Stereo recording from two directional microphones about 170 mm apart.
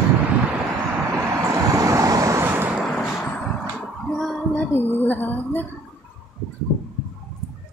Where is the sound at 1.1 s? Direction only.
15° right (ahead or behind).